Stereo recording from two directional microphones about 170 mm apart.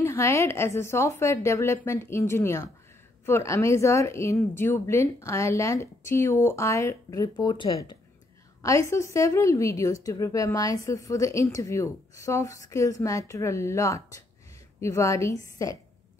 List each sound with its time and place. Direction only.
0.0 s a woman's voice: 15° left (ahead or behind)
8.6 s a woman's voice: 15° left (ahead or behind)